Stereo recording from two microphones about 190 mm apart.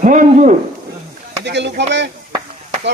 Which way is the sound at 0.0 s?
40° right (ahead or behind).